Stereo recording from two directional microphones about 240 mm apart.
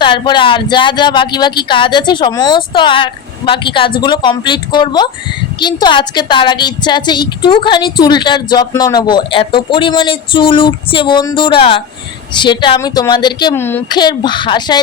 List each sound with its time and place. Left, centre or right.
0.0 s a woman's voice: centre